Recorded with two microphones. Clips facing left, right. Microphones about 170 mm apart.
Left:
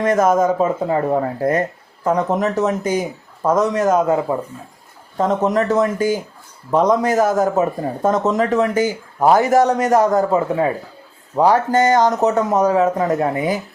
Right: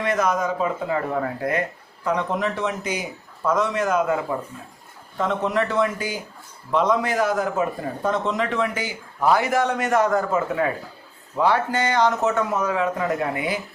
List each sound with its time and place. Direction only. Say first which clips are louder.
0.0 s a man's voice: left 7 dB; 45° left (ahead or behind)